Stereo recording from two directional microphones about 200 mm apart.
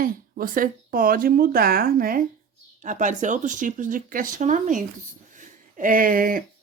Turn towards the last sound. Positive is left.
turn(degrees=-45)  # may be behind; listen again after turning